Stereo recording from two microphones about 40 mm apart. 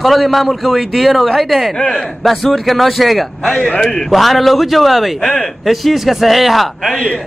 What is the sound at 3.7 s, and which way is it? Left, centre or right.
Speech, left.